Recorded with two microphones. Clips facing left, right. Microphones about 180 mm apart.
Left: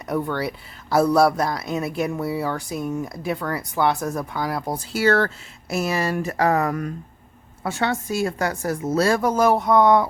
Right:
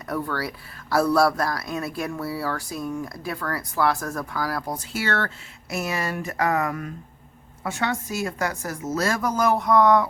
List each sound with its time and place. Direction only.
0.1 s speech: 20° left (ahead or behind)
4.8 s speech: 35° left (ahead or behind)